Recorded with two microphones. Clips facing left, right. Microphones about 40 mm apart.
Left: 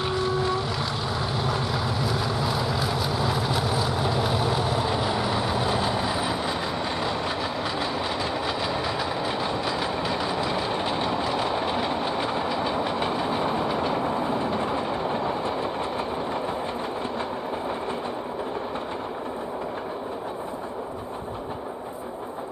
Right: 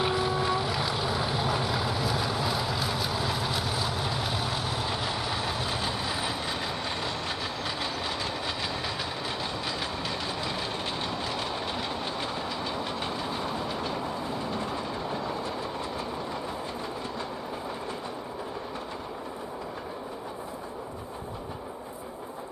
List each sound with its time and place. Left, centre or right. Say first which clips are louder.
0.0 s boat: left 2 dB; centre
9.9 s train: left 6 dB; centre; by 16.1 s left